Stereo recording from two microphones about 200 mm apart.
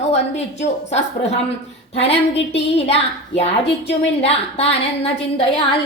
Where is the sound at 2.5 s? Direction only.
30° left (ahead or behind).